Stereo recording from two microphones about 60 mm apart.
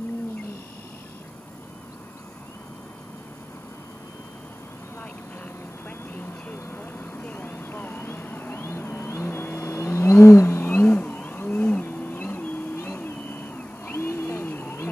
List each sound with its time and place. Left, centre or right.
5.9 s vehicle: left